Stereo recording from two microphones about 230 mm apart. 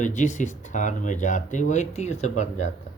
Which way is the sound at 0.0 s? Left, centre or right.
Left.